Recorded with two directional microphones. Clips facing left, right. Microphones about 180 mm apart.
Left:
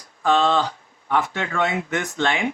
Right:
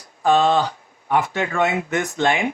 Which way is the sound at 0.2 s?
15° right (ahead or behind).